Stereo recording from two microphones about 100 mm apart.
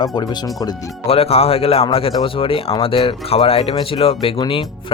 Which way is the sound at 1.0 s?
85° left.